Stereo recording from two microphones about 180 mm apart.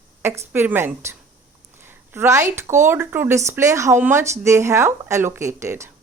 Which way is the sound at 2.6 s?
15° right (ahead or behind).